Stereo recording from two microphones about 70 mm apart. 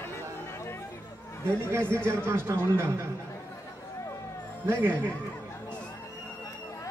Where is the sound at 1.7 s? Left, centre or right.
Right.